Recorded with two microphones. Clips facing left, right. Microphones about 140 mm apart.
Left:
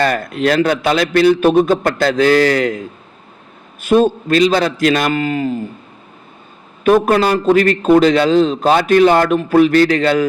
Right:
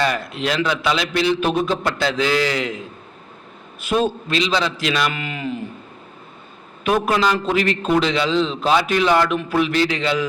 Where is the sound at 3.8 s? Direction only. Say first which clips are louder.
Left 8 dB; 45° left (ahead or behind).